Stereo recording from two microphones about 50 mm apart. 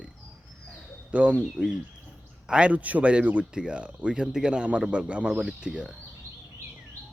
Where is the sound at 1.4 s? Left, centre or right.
Centre.